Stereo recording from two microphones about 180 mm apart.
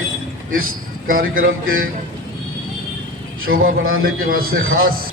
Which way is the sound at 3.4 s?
50° right (ahead or behind).